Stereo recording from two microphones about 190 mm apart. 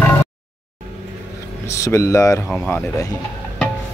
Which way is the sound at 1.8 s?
15° left (ahead or behind).